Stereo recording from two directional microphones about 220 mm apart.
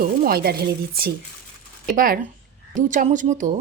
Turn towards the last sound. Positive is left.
turn(degrees=-35)  # may be behind; listen again after turning